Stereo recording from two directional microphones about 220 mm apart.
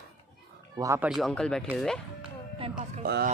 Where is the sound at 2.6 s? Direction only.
25° right (ahead or behind).